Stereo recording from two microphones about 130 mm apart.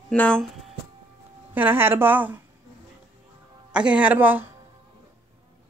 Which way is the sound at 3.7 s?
10° right (ahead or behind).